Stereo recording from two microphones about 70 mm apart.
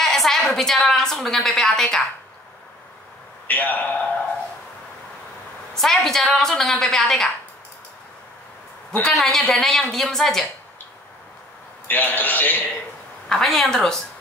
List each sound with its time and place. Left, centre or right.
0.0 s a woman's voice: centre
3.4 s a man's voice: left
5.8 s a woman's voice: centre
9.1 s a woman's voice: centre
11.9 s a man's voice: left
13.3 s a woman's voice: centre